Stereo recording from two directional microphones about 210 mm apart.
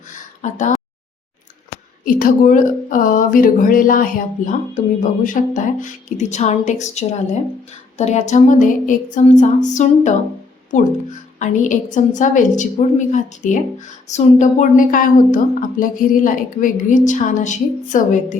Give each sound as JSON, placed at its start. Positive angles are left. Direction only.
{"t": 0.4, "sound": "a woman's voice", "side_deg": 35}
{"t": 2.0, "sound": "a woman's voice", "side_deg": 40}